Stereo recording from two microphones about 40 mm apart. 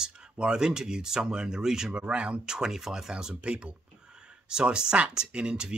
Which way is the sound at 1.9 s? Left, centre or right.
Right.